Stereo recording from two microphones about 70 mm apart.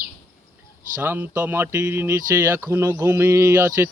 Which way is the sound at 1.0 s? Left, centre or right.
Right.